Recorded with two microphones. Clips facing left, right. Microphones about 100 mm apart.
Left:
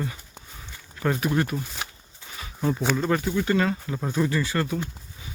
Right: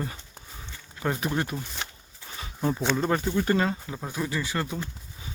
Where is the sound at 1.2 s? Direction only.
30° right (ahead or behind).